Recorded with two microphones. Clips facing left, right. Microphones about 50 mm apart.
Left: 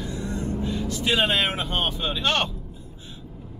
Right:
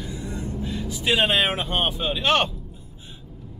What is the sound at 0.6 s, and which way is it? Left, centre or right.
Vehicle, centre.